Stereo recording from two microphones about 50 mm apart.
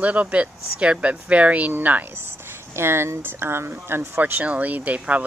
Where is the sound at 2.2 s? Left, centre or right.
Right.